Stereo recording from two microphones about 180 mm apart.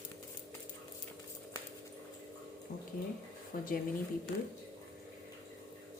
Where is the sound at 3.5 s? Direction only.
50° left (ahead or behind).